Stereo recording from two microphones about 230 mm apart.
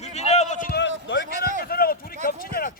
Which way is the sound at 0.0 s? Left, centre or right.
Left.